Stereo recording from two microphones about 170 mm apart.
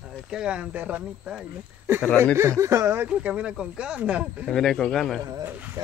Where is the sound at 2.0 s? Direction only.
10° left (ahead or behind).